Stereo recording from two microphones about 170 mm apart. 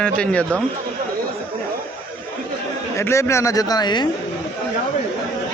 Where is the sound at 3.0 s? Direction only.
15° left (ahead or behind).